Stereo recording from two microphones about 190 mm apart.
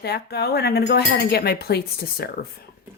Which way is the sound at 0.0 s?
60° left (ahead or behind).